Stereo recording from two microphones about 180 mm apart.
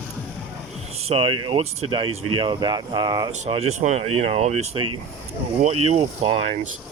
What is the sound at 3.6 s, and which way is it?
Speech, 35° right (ahead or behind).